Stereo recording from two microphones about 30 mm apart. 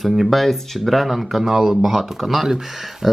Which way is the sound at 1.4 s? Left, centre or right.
Centre.